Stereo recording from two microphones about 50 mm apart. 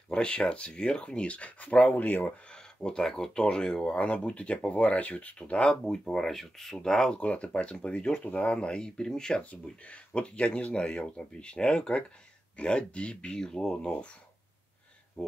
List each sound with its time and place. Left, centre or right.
0.1 s speech: centre
2.4 s speech: centre
5.7 s speech: centre
7.2 s speech: left
9.4 s speech: left
15.2 s speech: centre